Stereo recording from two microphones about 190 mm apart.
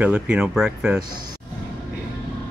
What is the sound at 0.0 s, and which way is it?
Speech, 5° right (ahead or behind).